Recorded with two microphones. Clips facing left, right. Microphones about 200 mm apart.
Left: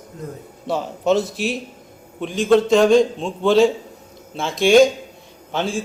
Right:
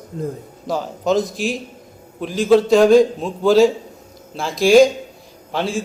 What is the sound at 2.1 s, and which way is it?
A man's voice, centre (ahead or behind).